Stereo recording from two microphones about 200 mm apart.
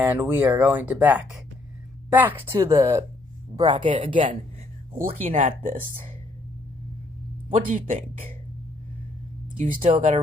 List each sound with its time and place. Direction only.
0.0 s speech: 10° right (ahead or behind); by 6.1 s 40° right (ahead or behind)
7.5 s speech: 40° right (ahead or behind)
9.6 s speech: 35° right (ahead or behind)